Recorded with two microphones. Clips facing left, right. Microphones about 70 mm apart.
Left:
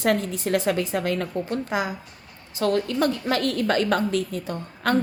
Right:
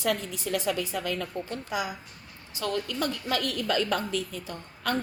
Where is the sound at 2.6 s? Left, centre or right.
Left.